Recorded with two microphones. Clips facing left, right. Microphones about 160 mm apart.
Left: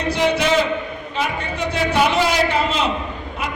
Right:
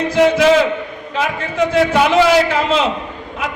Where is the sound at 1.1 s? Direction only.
90° right.